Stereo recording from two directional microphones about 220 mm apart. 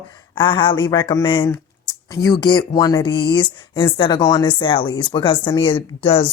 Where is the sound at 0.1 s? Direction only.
20° left (ahead or behind).